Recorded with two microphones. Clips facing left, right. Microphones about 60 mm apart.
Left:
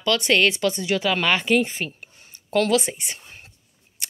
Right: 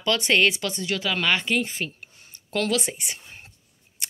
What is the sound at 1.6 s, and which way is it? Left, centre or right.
Speech, left.